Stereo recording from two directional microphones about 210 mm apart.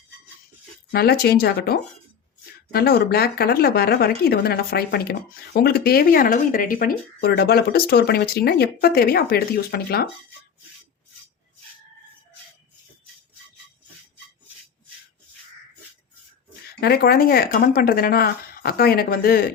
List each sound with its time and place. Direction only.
0.9 s speech: 45° left (ahead or behind)
16.8 s speech: 45° left (ahead or behind)